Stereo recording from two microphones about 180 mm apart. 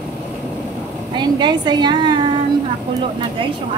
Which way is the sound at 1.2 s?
25° right (ahead or behind).